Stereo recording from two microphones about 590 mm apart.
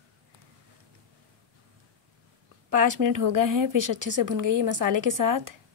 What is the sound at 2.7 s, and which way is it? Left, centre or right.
Speech, right.